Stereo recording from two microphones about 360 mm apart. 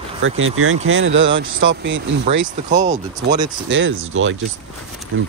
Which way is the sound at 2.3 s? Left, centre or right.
Right.